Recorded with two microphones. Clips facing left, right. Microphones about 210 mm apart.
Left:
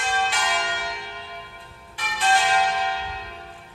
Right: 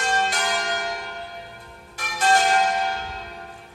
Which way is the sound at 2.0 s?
45° right (ahead or behind).